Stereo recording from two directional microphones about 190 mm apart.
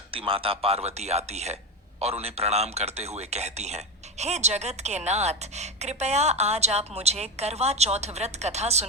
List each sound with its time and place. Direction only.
0.1 s a man's voice: 30° right (ahead or behind)